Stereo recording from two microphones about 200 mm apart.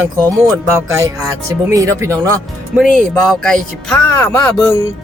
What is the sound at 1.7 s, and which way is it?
Speech, 15° right (ahead or behind).